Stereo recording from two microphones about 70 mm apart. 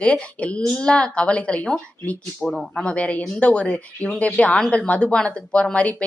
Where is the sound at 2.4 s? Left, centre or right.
Centre.